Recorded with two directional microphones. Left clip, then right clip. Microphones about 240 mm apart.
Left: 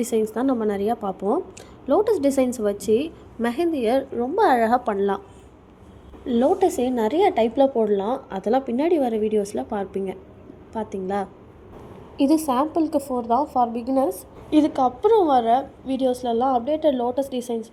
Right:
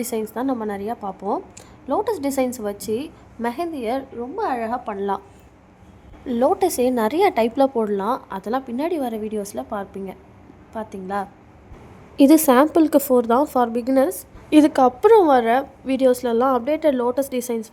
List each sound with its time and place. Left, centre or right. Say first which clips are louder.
0.0 s a woman's voice: left 3 dB; centre
6.2 s a woman's voice: right 1 dB; centre
8.3 s a woman's voice: left 3 dB; centre
12.3 s a woman's voice: right 6 dB; right